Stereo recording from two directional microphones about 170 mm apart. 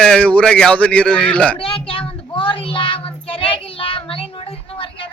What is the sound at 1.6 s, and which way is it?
Child singing, 30° left (ahead or behind).